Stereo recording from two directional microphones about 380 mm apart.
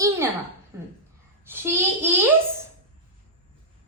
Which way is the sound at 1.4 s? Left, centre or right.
Centre.